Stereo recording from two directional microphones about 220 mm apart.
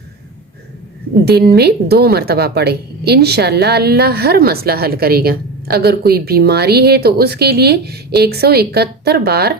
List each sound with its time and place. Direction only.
1.2 s a woman's voice: 45° right (ahead or behind)